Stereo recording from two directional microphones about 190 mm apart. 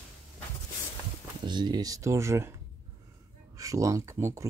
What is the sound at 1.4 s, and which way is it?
Speech, 25° right (ahead or behind).